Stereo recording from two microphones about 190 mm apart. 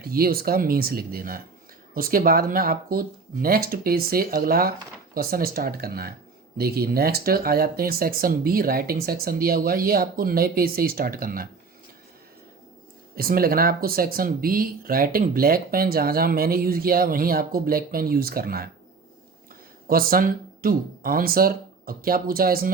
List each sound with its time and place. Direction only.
0.0 s speech: 50° right (ahead or behind)
13.1 s speech: 50° right (ahead or behind)
19.9 s speech: 50° right (ahead or behind)